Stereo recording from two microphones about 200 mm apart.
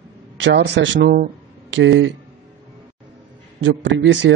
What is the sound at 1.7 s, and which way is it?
Speech, 70° right (ahead or behind).